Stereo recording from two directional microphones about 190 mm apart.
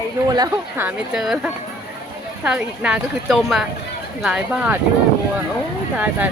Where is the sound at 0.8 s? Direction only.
5° right (ahead or behind).